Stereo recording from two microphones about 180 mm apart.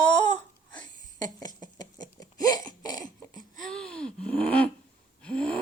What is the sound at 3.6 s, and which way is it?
Gasp, 5° left (ahead or behind).